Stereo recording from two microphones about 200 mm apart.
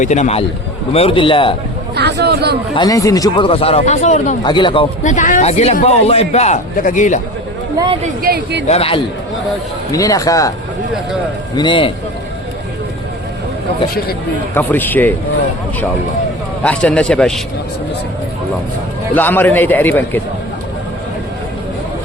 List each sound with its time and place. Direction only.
0.0 s a man's voice: 35° left (ahead or behind)
2.0 s speech: 55° right (ahead or behind)
2.7 s speech: 20° left (ahead or behind); by 4.4 s 35° left (ahead or behind)
4.4 s speech: 25° left (ahead or behind)
5.0 s a man's voice: 40° left (ahead or behind)
8.0 s speech: 50° right (ahead or behind)
8.6 s speech: 30° left (ahead or behind)
9.9 s a man's voice: 15° left (ahead or behind)
11.5 s speech: 25° left (ahead or behind)
14.5 s a man's voice: 10° left (ahead or behind)
16.6 s a man's voice: 5° left (ahead or behind)
19.1 s a man's voice: 10° left (ahead or behind)